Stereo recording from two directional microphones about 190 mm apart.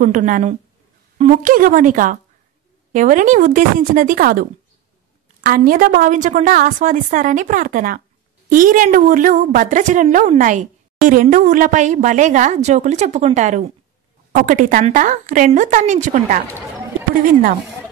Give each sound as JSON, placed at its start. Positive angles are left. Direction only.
{"t": 0.0, "sound": "a woman's voice", "side_deg": -45}